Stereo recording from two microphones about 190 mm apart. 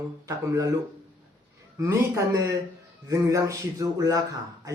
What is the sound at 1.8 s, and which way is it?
Speech, 15° right (ahead or behind).